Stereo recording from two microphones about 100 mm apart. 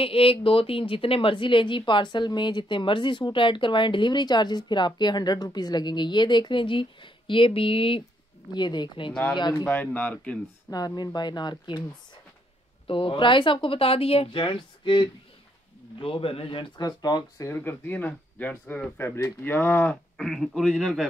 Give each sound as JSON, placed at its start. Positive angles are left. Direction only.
{"t": 0.0, "sound": "a woman's voice", "side_deg": 65}
{"t": 8.5, "sound": "speech", "side_deg": 50}
{"t": 9.7, "sound": "speech", "side_deg": 15}
{"t": 10.7, "sound": "speech", "side_deg": 40}
{"t": 12.8, "sound": "a woman's voice", "side_deg": 60}
{"t": 16.0, "sound": "a woman's voice", "side_deg": 65}
{"t": 16.8, "sound": "speech", "side_deg": 45}
{"t": 17.5, "sound": "speech", "side_deg": 20}
{"t": 20.2, "sound": "a man's voice", "side_deg": 0}